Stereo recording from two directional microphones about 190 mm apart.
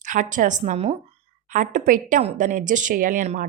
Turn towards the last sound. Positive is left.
turn(degrees=-40)  # may be behind; listen again after turning